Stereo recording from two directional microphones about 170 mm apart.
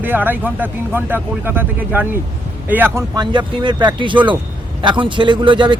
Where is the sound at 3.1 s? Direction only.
25° right (ahead or behind).